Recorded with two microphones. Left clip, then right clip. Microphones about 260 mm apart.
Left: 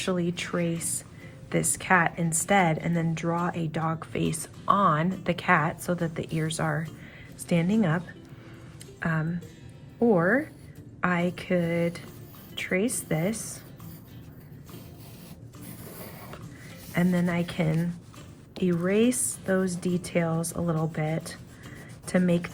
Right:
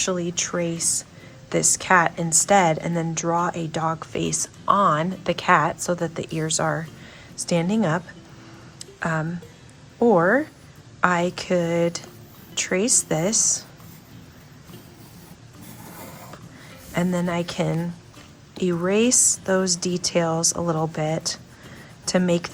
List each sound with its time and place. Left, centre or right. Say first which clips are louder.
0.0 s a woman's voice: right 5 dB; centre
16.9 s a woman's voice: right 4 dB; centre